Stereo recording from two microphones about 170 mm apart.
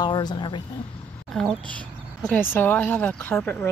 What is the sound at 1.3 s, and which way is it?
Speech, 5° left (ahead or behind).